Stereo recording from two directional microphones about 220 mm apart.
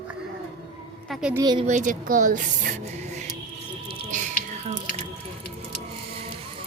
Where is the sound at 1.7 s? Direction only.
35° right (ahead or behind).